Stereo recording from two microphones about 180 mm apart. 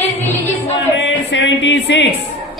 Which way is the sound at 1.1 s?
80° left.